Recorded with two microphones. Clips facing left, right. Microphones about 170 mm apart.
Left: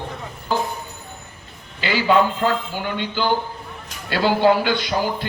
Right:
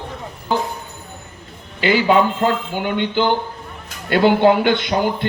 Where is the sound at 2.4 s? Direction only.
55° right (ahead or behind).